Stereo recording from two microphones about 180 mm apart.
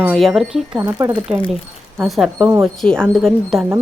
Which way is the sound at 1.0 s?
20° right (ahead or behind).